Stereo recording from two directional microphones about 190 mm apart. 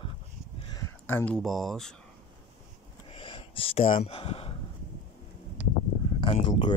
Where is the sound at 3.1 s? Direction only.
30° left (ahead or behind).